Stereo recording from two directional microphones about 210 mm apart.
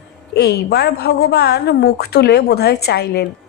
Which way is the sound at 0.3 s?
50° left (ahead or behind).